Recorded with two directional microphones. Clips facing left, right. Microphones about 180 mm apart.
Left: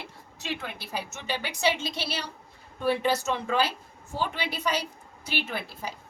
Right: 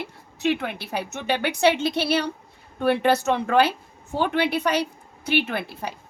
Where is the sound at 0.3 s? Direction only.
60° right (ahead or behind).